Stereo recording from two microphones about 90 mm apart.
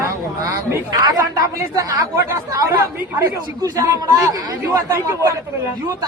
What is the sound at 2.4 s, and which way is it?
A man's voice, 45° right (ahead or behind).